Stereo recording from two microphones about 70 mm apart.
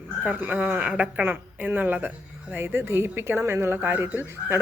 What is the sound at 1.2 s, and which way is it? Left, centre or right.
Speech, right.